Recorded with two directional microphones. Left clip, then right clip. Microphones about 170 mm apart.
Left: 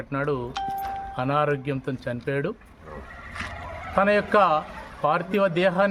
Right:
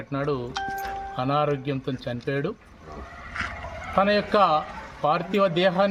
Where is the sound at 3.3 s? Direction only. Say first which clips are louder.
Right 4 dB; 30° right (ahead or behind).